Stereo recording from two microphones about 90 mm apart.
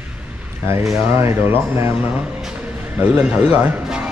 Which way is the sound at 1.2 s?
30° right (ahead or behind).